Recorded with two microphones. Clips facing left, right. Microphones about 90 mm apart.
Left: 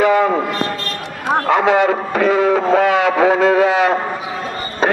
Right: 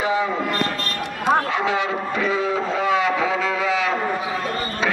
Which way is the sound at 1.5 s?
60° left (ahead or behind).